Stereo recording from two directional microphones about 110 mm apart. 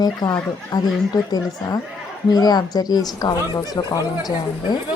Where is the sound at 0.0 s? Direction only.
40° left (ahead or behind).